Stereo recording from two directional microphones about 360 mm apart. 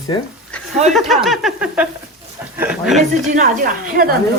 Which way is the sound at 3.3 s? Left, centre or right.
Right.